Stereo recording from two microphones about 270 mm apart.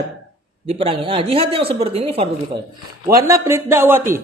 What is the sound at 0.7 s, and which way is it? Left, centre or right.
A man's voice, right.